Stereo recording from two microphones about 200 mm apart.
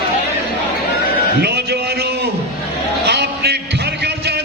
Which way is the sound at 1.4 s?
55° right (ahead or behind).